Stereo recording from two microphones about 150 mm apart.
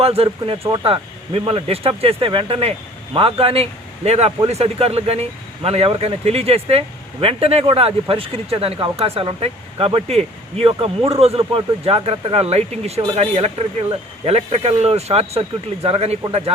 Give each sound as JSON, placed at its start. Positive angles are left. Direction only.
{"t": 0.0, "sound": "speech", "side_deg": -40}
{"t": 0.6, "sound": "speech", "side_deg": -25}
{"t": 0.9, "sound": "speech", "side_deg": -40}